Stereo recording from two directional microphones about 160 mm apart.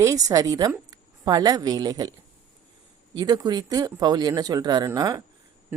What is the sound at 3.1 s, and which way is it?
Speech, 25° right (ahead or behind).